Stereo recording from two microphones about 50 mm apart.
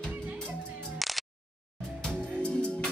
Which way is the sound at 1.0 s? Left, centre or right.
Centre.